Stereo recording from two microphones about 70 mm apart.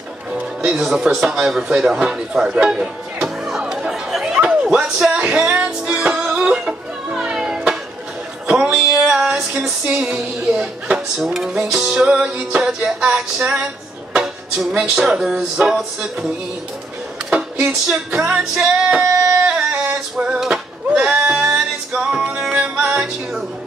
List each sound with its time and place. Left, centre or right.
0.3 s music: centre
0.7 s a sound: centre
5.1 s music: centre
8.5 s a sound: centre
9.1 s music: centre
10.0 s speech: centre
14.1 s music: centre
14.8 s speech: centre
17.3 s music: centre
19.4 s goat: centre
21.1 s music: centre